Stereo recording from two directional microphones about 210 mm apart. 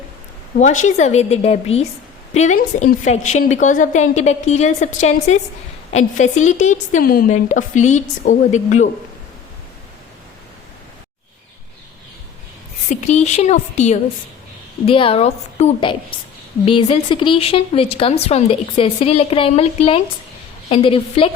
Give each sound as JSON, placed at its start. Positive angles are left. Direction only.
{"t": 0.5, "sound": "a woman's voice", "side_deg": 35}
{"t": 12.9, "sound": "a woman's voice", "side_deg": 35}